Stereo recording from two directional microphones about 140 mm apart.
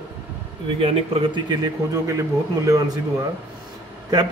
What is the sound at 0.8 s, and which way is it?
Speech, 45° right (ahead or behind).